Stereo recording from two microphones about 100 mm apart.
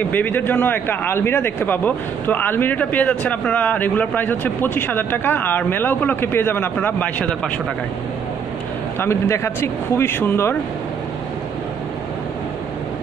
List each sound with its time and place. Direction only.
0.1 s a man's voice: 20° left (ahead or behind)
9.0 s a man's voice: 25° left (ahead or behind)